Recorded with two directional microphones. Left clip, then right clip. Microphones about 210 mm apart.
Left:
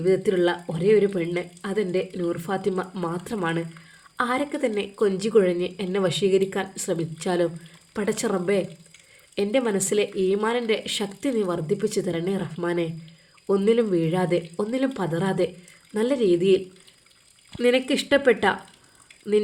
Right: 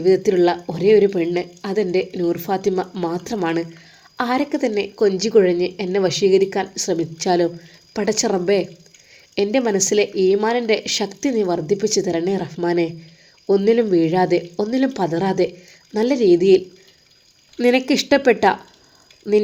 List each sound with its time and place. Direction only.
0.0 s speech: 10° right (ahead or behind)